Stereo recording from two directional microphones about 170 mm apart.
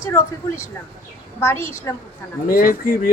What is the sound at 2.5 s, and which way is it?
Speech, 60° left (ahead or behind).